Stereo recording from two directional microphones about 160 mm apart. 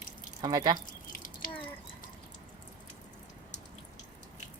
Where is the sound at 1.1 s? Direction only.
60° left (ahead or behind).